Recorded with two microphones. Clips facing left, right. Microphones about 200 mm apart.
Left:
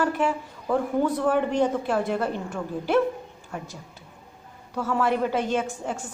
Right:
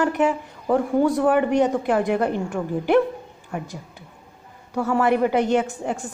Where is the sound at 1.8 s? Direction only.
15° right (ahead or behind).